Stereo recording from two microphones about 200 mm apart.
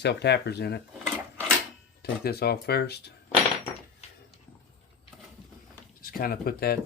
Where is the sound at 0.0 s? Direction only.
55° left (ahead or behind).